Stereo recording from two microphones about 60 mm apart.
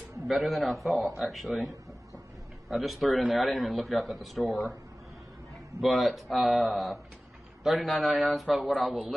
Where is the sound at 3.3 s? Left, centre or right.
Centre.